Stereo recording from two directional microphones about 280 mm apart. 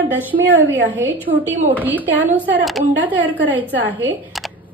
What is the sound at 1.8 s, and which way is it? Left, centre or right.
A woman's voice, centre.